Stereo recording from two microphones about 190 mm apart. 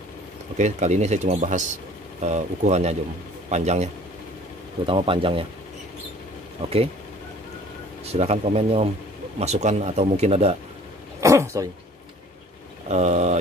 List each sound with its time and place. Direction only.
0.6 s a man's voice: 40° right (ahead or behind)
6.6 s speech: 35° right (ahead or behind)
8.0 s speech: 35° right (ahead or behind)
11.1 s speech: 15° right (ahead or behind)
12.8 s speech: 35° right (ahead or behind)